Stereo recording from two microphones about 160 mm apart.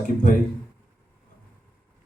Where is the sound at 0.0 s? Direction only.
60° left (ahead or behind).